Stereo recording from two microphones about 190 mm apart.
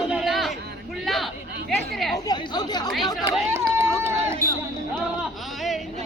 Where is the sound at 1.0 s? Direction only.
Centre (ahead or behind).